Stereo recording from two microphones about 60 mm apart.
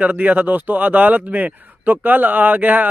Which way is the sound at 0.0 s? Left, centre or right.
Right.